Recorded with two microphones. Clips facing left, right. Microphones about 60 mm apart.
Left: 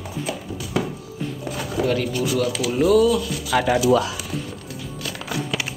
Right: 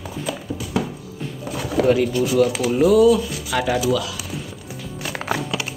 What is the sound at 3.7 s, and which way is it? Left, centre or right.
Speech, centre.